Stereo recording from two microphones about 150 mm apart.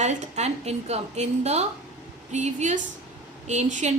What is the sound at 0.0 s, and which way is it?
A woman's voice, 50° right (ahead or behind).